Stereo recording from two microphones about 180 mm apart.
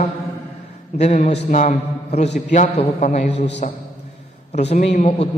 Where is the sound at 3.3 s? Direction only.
75° left (ahead or behind).